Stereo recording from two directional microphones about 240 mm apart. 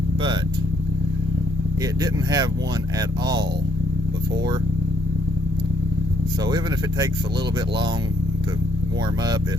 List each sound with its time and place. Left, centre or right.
2.0 s speech: centre